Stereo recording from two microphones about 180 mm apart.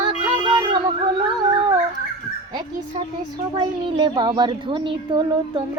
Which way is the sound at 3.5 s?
25° right (ahead or behind).